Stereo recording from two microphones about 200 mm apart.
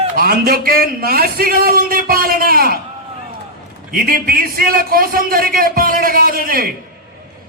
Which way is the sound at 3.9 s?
45° right (ahead or behind).